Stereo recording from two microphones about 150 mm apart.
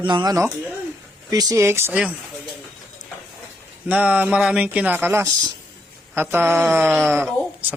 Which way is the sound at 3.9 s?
10° right (ahead or behind).